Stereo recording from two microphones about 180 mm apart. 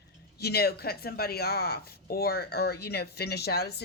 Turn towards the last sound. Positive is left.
turn(degrees=65)  # may be behind; listen again after turning